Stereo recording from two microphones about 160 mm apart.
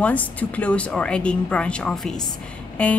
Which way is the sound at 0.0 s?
10° left (ahead or behind).